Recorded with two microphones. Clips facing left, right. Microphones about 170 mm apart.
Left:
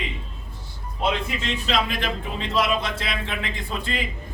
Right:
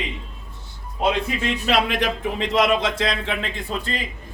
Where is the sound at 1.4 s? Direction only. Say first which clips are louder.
Right 4 dB; 65° right (ahead or behind).